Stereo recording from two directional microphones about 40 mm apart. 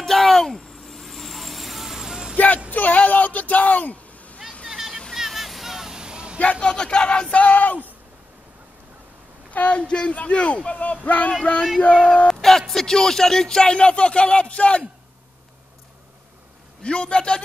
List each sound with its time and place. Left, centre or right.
0.0 s a sound: centre
2.3 s a sound: left
4.6 s vehicle: centre; by 6.4 s right
6.6 s speech: left
7.3 s speech: left
9.5 s speech: left
11.9 s a man's voice: centre
16.8 s speech: left